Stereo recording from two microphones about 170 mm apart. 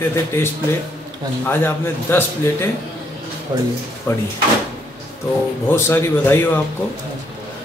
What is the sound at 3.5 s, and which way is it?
Speech, 25° right (ahead or behind).